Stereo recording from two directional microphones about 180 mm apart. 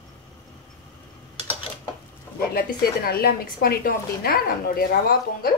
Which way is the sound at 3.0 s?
60° left (ahead or behind).